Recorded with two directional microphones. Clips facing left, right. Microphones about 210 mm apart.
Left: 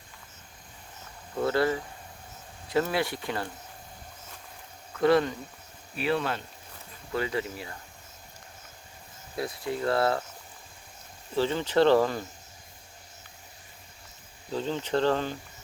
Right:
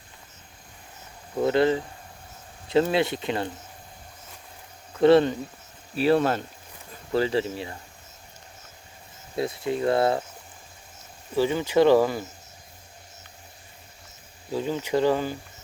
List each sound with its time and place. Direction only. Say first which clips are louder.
1.4 s speech: right 5 dB; 20° right (ahead or behind)
4.9 s speech: right 6 dB; 25° right (ahead or behind)
6.0 s speech: right 7 dB; 40° right (ahead or behind)
7.1 s speech: right 6 dB; 30° right (ahead or behind)
9.3 s speech: right 5 dB; 25° right (ahead or behind)
11.3 s speech: right 3 dB; 10° right (ahead or behind)
14.5 s speech: right 3 dB; 10° right (ahead or behind)